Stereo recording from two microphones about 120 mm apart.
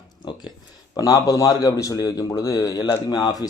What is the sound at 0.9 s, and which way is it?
A man's voice, 30° left (ahead or behind).